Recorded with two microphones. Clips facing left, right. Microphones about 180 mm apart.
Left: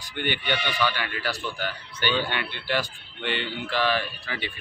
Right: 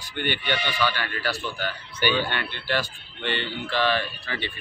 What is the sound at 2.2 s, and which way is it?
Speech, 15° left (ahead or behind).